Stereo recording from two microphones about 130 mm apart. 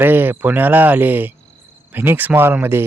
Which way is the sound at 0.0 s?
15° right (ahead or behind).